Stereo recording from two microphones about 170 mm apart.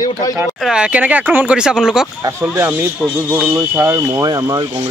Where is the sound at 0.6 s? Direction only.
5° right (ahead or behind).